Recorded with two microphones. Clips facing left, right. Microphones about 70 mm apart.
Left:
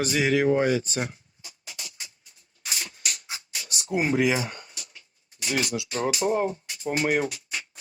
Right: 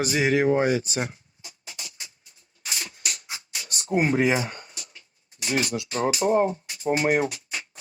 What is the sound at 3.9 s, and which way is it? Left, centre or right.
Speech, right.